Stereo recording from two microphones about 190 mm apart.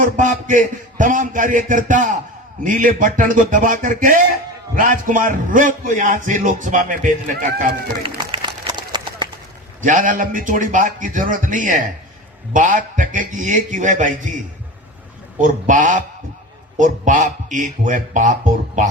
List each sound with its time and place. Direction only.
0.0 s a man's voice: 40° right (ahead or behind)
8.0 s a sound: 25° right (ahead or behind)
9.8 s a man's voice: 45° right (ahead or behind)
15.4 s a man's voice: 45° right (ahead or behind)